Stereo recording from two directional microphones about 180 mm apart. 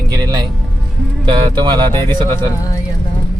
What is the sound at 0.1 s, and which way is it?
Music, 20° right (ahead or behind).